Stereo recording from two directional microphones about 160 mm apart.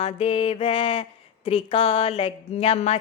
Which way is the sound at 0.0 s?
35° left (ahead or behind).